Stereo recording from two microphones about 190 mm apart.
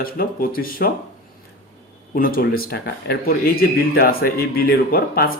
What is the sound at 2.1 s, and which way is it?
Speech, 50° left (ahead or behind).